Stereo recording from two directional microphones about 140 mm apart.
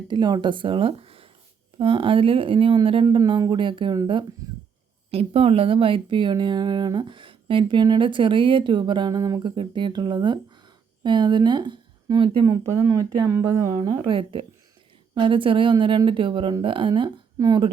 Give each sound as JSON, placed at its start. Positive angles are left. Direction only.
{"t": 0.1, "sound": "speech", "side_deg": -30}
{"t": 5.1, "sound": "a woman's voice", "side_deg": -45}
{"t": 12.5, "sound": "speech", "side_deg": -20}